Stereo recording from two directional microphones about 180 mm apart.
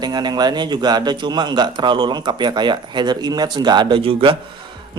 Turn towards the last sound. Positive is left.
turn(degrees=-30)  # may be behind; listen again after turning